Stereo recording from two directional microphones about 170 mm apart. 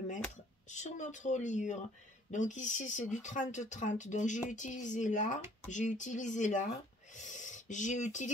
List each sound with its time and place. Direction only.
0.7 s speech: 45° left (ahead or behind)